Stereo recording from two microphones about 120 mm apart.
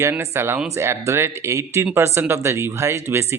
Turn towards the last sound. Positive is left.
turn(degrees=-20)  # may be behind; listen again after turning